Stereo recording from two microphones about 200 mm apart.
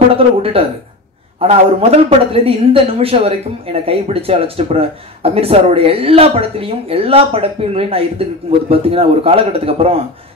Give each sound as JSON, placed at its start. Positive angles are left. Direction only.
{"t": 0.4, "sound": "speech", "side_deg": -30}